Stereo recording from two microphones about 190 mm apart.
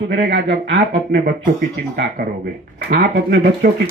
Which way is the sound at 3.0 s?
65° right (ahead or behind).